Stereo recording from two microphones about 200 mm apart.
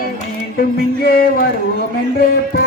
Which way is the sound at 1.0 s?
45° left (ahead or behind).